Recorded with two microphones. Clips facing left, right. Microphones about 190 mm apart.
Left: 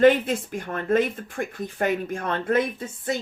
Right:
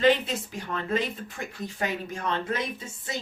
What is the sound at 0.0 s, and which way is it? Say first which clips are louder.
Speech: left 5 dB; 50° left (ahead or behind).